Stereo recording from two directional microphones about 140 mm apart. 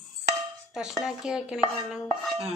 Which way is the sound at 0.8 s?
5° right (ahead or behind).